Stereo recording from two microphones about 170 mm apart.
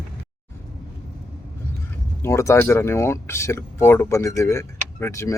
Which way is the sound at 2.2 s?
15° left (ahead or behind).